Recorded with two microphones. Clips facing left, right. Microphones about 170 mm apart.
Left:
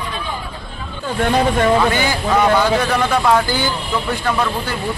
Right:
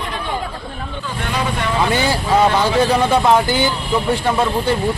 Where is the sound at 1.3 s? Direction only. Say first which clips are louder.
Left 6 dB; 45° left (ahead or behind).